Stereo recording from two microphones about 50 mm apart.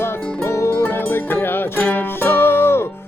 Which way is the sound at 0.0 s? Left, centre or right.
Left.